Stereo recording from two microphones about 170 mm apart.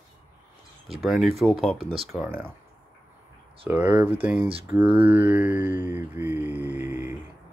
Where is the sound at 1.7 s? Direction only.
35° right (ahead or behind).